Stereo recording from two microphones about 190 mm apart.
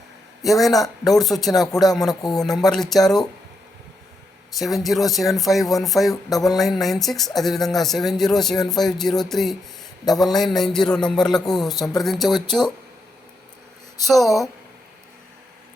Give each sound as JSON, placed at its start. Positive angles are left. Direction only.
{"t": 0.4, "sound": "speech", "side_deg": 0}
{"t": 1.0, "sound": "speech", "side_deg": 20}
{"t": 1.3, "sound": "speech", "side_deg": 0}
{"t": 4.5, "sound": "speech", "side_deg": 0}
{"t": 14.1, "sound": "speech", "side_deg": 0}